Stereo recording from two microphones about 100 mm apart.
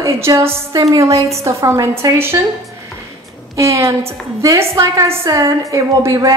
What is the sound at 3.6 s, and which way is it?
A woman's voice, 30° right (ahead or behind).